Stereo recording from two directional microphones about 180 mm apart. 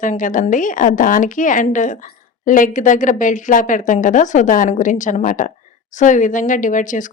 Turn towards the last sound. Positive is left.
turn(degrees=45)  # may be behind; listen again after turning